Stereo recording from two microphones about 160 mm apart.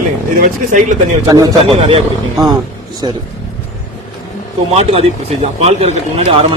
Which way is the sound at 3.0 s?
30° right (ahead or behind).